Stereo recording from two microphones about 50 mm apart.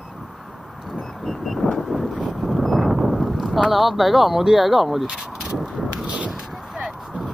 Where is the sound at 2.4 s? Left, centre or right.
Centre.